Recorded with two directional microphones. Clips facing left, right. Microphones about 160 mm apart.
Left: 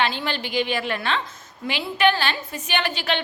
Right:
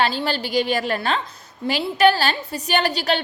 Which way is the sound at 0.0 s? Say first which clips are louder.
Right 3 dB; 35° right (ahead or behind).